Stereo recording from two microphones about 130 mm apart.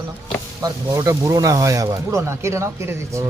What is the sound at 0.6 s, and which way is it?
Speech, 30° right (ahead or behind).